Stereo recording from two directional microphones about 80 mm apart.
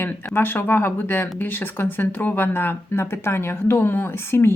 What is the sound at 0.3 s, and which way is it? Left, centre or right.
Speech, left.